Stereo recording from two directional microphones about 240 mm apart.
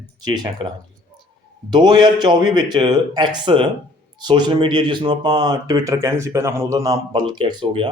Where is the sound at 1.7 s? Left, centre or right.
Centre.